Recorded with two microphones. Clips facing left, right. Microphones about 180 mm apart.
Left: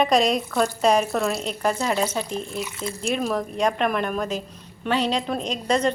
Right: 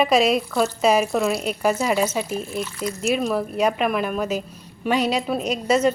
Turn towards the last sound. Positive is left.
turn(degrees=-5)  # may be behind; listen again after turning